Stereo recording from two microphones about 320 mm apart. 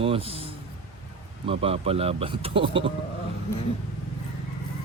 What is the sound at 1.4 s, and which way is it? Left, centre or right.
Speech, centre.